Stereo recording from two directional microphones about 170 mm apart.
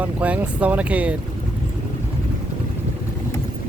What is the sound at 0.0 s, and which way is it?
Speech, 10° right (ahead or behind).